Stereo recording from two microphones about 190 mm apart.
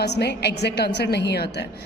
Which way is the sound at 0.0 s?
60° left (ahead or behind).